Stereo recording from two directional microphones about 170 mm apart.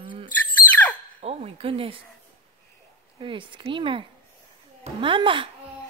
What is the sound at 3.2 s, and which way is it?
Speech, 30° right (ahead or behind).